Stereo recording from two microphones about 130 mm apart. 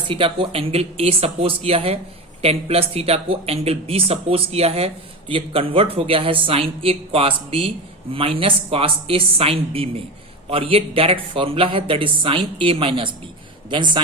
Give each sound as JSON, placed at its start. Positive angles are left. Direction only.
{"t": 0.1, "sound": "a woman's voice", "side_deg": -45}